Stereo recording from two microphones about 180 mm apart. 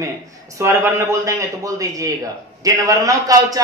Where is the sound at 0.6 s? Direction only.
15° right (ahead or behind).